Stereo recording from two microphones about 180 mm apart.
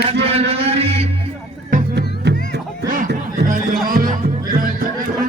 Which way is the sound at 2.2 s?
70° right (ahead or behind).